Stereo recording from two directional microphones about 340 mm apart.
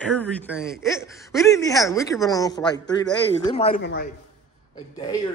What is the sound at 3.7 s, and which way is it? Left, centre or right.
Speech, left.